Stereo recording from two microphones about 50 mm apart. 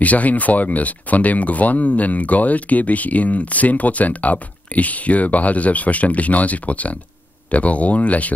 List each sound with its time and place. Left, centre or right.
0.0 s speech: left